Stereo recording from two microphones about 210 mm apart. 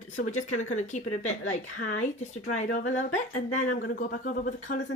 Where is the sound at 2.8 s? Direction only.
65° left (ahead or behind).